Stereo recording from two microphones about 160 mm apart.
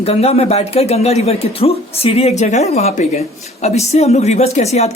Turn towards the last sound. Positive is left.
turn(degrees=40)  # may be behind; listen again after turning